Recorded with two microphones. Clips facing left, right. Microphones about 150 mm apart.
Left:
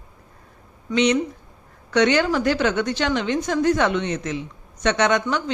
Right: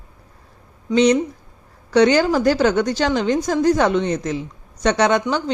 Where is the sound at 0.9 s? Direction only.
35° right (ahead or behind).